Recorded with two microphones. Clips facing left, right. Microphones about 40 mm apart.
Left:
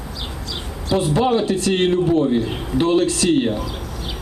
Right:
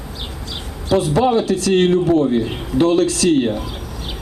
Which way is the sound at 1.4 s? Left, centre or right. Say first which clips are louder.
Right 3 dB; left.